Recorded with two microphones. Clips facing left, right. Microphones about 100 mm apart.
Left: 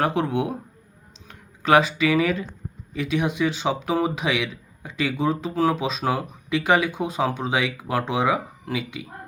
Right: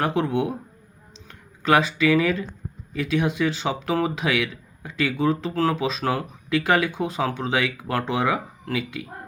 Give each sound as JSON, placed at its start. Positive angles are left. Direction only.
{"t": 0.0, "sound": "speech", "side_deg": 20}